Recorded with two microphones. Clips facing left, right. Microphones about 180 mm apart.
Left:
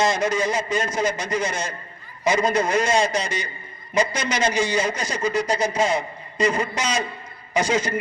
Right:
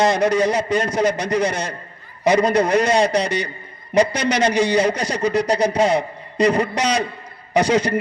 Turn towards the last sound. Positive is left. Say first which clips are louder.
# right 5 dB
turn(degrees=-65)  # may be behind; listen again after turning